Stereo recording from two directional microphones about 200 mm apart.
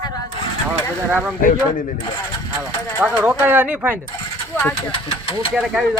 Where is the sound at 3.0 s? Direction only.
10° right (ahead or behind).